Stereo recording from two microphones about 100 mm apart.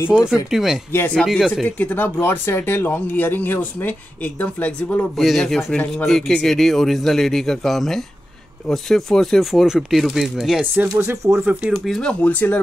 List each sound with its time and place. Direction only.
0.1 s speech: 5° right (ahead or behind)
0.9 s speech: 15° left (ahead or behind)
1.2 s speech: 5° left (ahead or behind)
1.8 s speech: 15° left (ahead or behind)
5.1 s speech: centre (ahead or behind)
5.7 s speech: 15° left (ahead or behind)
6.0 s speech: 5° left (ahead or behind)
10.6 s speech: 15° right (ahead or behind)
11.7 s speech: 5° left (ahead or behind)